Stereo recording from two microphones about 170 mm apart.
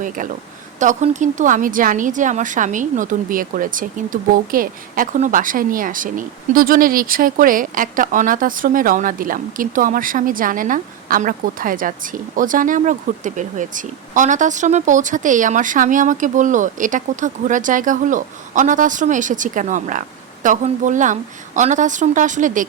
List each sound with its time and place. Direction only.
0.2 s a woman's voice: 50° right (ahead or behind)